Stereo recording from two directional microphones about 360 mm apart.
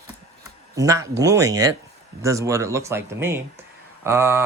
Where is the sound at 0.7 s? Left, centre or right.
Centre.